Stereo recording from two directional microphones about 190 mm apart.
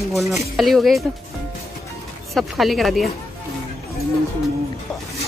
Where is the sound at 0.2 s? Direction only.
Centre (ahead or behind).